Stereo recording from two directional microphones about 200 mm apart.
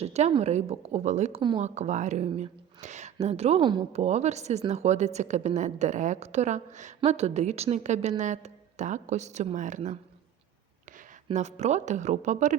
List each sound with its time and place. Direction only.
0.0 s a woman's voice: 30° right (ahead or behind)
1.4 s speech: 25° right (ahead or behind)
1.6 s a woman's voice: 35° right (ahead or behind)
4.0 s a woman's voice: 35° right (ahead or behind)
11.3 s a woman's voice: 35° right (ahead or behind)